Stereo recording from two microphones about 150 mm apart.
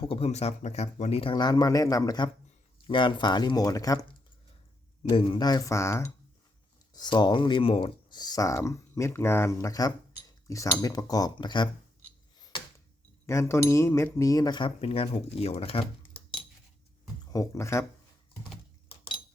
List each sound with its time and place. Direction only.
0.0 s speech: 40° left (ahead or behind); by 4.0 s 25° left (ahead or behind)
5.0 s speech: 35° left (ahead or behind)
13.2 s speech: 20° left (ahead or behind); by 15.8 s 40° left (ahead or behind)
17.3 s speech: 20° left (ahead or behind)